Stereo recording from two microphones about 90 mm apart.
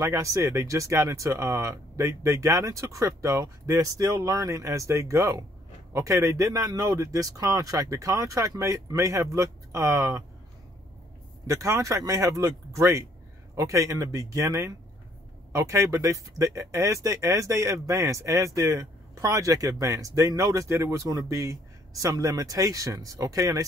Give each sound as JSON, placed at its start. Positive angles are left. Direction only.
{"t": 0.0, "sound": "speech", "side_deg": -35}
{"t": 11.4, "sound": "speech", "side_deg": -35}